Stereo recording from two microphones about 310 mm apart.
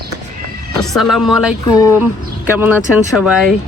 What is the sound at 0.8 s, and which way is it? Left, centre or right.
Speech, centre.